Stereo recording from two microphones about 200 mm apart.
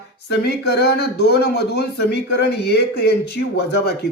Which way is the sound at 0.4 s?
55° left (ahead or behind).